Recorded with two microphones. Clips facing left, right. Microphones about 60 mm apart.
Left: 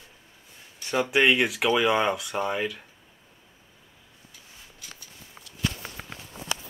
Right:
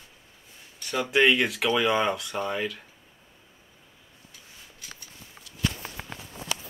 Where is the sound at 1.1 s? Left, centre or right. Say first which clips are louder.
Right 1 dB; centre.